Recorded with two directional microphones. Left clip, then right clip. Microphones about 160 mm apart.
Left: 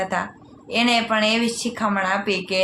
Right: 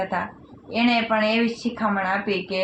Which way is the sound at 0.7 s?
50° left (ahead or behind).